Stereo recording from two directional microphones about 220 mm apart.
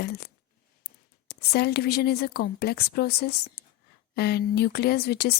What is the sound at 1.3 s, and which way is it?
Speech, 45° left (ahead or behind).